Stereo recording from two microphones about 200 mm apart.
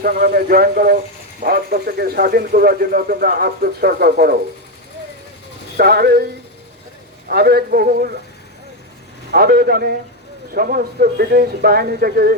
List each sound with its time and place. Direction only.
0.0 s speech: 45° right (ahead or behind)
5.7 s speech: 50° right (ahead or behind)
7.3 s speech: 50° right (ahead or behind)
9.3 s speech: 50° right (ahead or behind)